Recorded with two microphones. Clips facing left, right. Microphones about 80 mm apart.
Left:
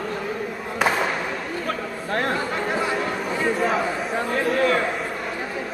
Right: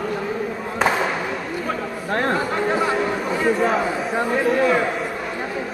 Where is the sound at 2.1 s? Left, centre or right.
Centre.